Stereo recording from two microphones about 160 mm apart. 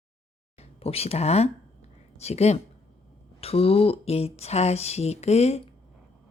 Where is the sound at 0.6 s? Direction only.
40° left (ahead or behind).